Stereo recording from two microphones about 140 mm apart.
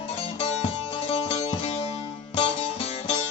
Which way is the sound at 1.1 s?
45° left (ahead or behind).